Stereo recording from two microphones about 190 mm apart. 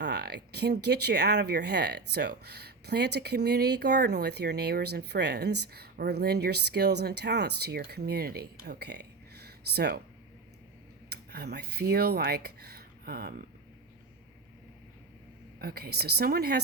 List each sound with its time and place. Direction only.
0.0 s speech: 60° right (ahead or behind)
11.1 s speech: 60° right (ahead or behind)
15.5 s speech: 55° right (ahead or behind)